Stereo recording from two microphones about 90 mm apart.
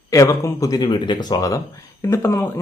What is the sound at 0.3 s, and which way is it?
Speech, 35° left (ahead or behind).